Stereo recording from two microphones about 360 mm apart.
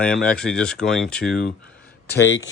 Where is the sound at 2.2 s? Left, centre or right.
Left.